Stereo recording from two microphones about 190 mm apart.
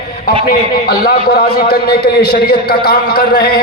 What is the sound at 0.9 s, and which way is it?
A man's voice, 55° left (ahead or behind).